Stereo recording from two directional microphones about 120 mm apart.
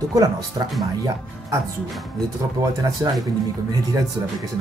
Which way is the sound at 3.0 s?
20° right (ahead or behind).